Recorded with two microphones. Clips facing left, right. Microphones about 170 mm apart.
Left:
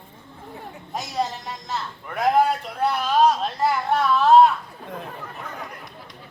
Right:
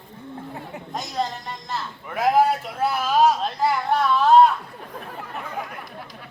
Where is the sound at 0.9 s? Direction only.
5° left (ahead or behind).